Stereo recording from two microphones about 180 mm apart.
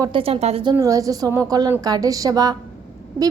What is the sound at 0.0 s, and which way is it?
A woman's voice, 30° right (ahead or behind).